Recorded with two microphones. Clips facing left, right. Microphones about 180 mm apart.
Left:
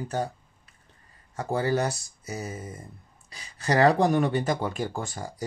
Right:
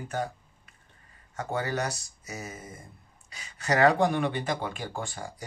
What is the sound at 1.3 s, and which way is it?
Speech, 35° left (ahead or behind).